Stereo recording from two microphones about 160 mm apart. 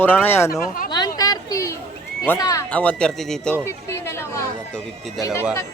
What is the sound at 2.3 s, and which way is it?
Speech, 20° left (ahead or behind).